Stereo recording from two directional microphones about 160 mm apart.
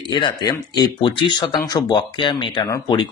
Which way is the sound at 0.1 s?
30° left (ahead or behind).